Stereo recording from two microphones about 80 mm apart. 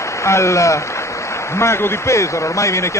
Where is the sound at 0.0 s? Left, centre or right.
Left.